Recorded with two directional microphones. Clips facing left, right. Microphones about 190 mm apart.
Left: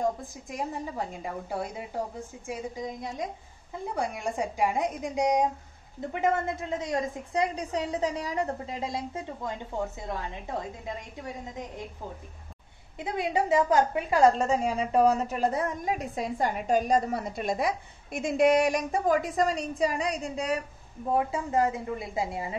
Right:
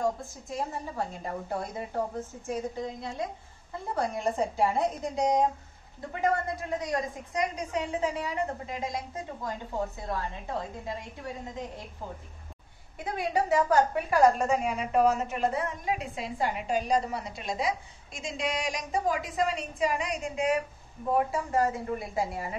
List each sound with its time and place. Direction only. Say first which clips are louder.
0.3 s a woman's voice: even; 15° left (ahead or behind)
12.9 s a woman's voice: left 1 dB; 20° left (ahead or behind)
21.3 s a woman's voice: left 1 dB; 20° left (ahead or behind)